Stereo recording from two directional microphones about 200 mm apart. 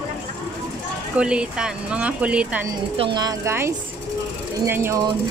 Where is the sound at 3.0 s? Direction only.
20° right (ahead or behind).